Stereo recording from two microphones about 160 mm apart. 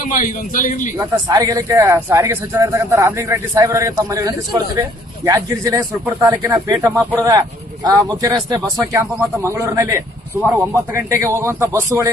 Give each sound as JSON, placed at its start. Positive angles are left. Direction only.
{"t": 0.0, "sound": "a man's voice", "side_deg": 55}
{"t": 0.9, "sound": "speech", "side_deg": -20}